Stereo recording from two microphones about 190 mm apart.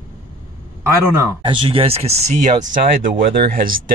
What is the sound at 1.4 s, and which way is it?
Speech, 25° right (ahead or behind).